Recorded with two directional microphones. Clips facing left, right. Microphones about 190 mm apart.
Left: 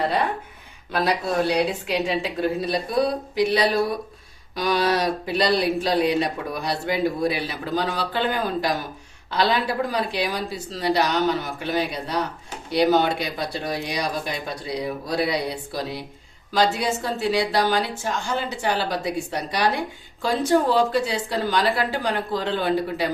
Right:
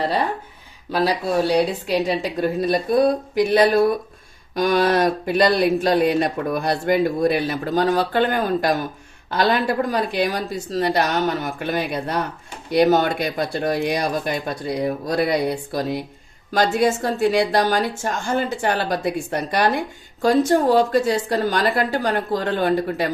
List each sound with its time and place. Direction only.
1.0 s speech: 35° right (ahead or behind)